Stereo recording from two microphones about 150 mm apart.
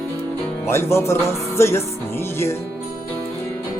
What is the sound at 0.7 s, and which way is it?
Music, 15° left (ahead or behind).